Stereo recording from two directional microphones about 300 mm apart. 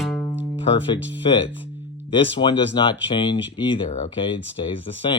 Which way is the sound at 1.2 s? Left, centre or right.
Centre.